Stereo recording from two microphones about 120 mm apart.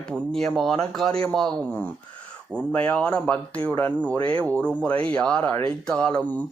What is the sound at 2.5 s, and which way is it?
Speech, 10° left (ahead or behind).